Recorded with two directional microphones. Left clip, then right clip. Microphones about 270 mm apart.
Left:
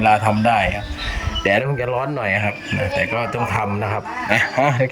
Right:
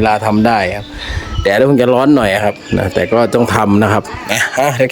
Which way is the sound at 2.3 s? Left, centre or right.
Right.